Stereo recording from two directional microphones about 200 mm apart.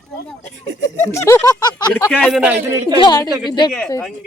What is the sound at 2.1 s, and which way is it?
Speech, 5° left (ahead or behind).